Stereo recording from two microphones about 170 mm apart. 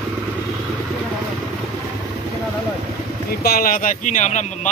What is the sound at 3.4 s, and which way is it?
Speech, 65° left (ahead or behind).